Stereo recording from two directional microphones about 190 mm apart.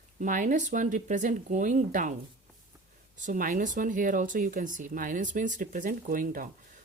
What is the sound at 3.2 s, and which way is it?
Speech, 45° right (ahead or behind).